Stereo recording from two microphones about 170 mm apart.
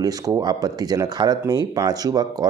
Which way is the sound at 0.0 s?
25° right (ahead or behind).